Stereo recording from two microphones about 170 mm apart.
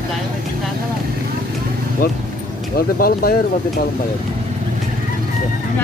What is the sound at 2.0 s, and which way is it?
Speech, 60° left (ahead or behind).